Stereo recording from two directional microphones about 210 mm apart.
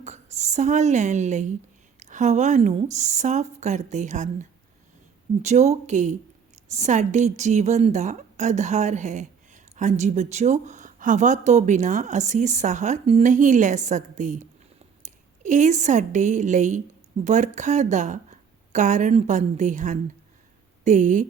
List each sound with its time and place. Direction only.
0.0 s a woman's voice: 35° right (ahead or behind)
5.4 s a woman's voice: 35° right (ahead or behind)